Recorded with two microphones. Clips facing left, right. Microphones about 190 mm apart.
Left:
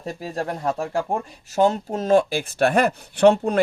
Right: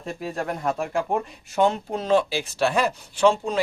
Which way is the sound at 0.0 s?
35° left (ahead or behind).